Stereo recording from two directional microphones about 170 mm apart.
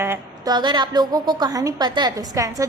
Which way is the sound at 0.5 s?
25° right (ahead or behind).